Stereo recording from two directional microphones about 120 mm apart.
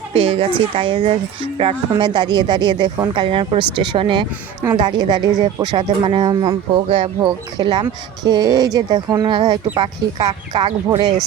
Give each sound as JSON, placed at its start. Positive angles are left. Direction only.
{"t": 0.1, "sound": "speech", "side_deg": -50}
{"t": 2.0, "sound": "speech", "side_deg": -40}